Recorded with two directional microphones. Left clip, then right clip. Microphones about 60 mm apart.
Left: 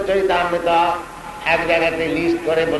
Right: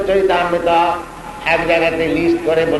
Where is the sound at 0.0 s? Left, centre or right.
Left.